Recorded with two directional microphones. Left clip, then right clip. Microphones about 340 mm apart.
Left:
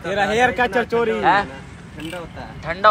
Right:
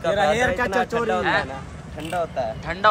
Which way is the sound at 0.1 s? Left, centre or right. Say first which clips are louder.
Left 3 dB; centre.